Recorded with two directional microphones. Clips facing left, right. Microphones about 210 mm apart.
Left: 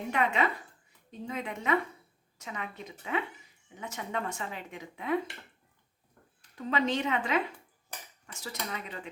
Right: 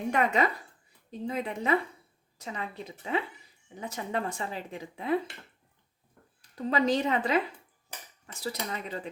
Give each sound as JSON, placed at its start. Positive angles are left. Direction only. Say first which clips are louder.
{"t": 0.1, "sound": "speech", "louder": "right 2 dB", "side_deg": -40}
{"t": 6.6, "sound": "speech", "louder": "right 3 dB", "side_deg": -35}